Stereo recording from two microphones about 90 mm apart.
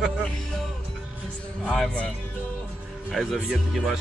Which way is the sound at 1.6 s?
10° left (ahead or behind).